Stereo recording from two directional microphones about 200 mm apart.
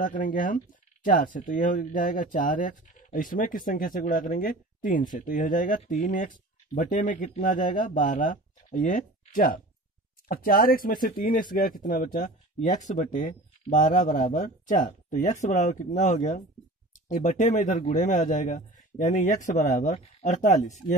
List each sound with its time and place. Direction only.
0.0 s speech: 40° left (ahead or behind)